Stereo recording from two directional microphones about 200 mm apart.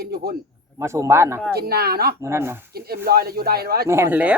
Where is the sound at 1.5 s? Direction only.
50° right (ahead or behind).